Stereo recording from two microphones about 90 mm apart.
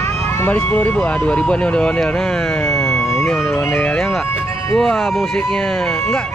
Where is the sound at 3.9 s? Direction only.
5° left (ahead or behind).